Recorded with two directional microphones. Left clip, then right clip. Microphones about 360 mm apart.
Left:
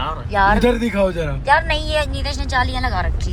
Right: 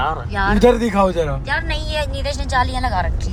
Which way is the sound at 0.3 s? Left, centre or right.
Centre.